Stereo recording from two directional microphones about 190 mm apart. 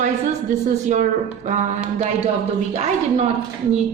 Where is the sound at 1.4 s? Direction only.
40° right (ahead or behind).